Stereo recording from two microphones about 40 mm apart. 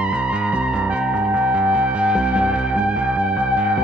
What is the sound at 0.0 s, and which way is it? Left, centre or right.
Music, right.